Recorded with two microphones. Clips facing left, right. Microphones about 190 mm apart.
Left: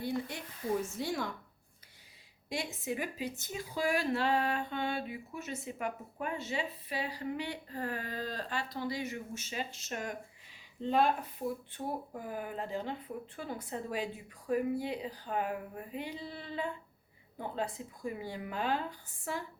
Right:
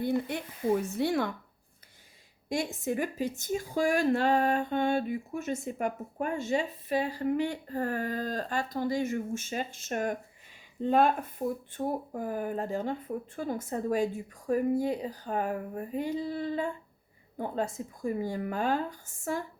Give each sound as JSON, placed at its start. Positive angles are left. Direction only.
{"t": 0.3, "sound": "a woman's voice", "side_deg": -60}
{"t": 2.5, "sound": "a woman's voice", "side_deg": -45}